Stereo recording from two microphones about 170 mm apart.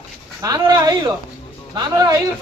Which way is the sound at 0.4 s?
25° right (ahead or behind).